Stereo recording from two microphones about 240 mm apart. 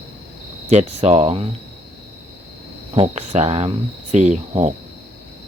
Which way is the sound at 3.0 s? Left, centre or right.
Right.